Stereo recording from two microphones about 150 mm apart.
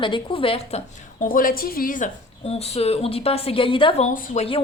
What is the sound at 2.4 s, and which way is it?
A woman's voice, 45° left (ahead or behind).